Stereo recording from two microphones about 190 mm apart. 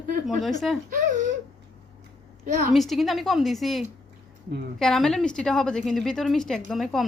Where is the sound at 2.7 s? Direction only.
Centre (ahead or behind).